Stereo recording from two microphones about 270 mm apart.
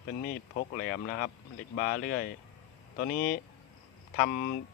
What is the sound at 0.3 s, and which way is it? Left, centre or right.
Speech, left.